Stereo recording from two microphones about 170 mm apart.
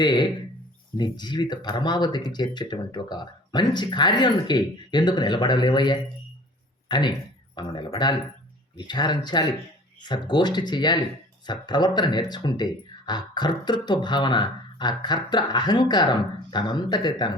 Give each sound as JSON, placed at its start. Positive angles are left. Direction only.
{"t": 0.0, "sound": "speech", "side_deg": 25}